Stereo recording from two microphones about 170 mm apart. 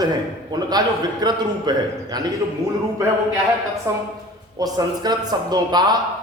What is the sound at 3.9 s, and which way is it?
A man's voice, 20° right (ahead or behind).